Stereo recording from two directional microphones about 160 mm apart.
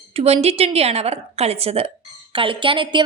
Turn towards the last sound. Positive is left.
turn(degrees=-30)  # may be behind; listen again after turning